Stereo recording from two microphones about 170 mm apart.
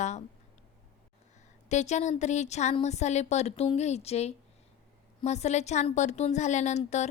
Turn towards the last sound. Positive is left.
turn(degrees=40)  # may be behind; listen again after turning